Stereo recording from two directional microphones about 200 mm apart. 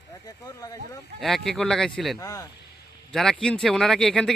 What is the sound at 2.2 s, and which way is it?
Speech, 15° left (ahead or behind).